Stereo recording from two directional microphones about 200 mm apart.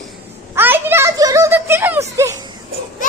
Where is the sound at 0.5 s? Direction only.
10° right (ahead or behind).